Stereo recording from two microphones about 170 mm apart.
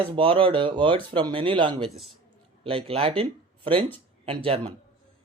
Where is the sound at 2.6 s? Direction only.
30° right (ahead or behind).